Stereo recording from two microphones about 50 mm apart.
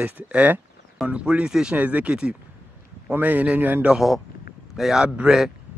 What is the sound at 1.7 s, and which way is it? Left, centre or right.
Speech, right.